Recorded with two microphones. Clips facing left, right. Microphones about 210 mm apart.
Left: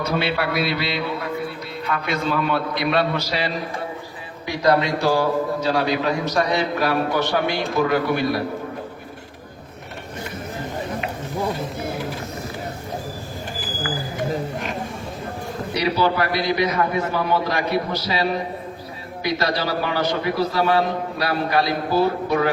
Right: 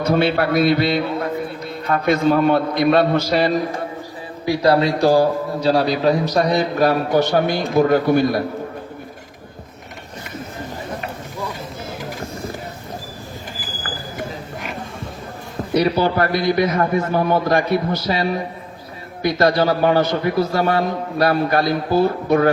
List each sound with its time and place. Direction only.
0.0 s a man's voice: 50° right (ahead or behind)
4.4 s a man's voice: 30° right (ahead or behind)
15.7 s a man's voice: 50° right (ahead or behind)